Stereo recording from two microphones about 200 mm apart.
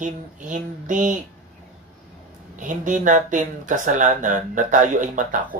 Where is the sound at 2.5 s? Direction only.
40° right (ahead or behind).